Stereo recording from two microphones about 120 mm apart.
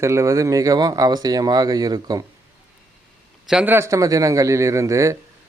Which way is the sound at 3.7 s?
25° right (ahead or behind).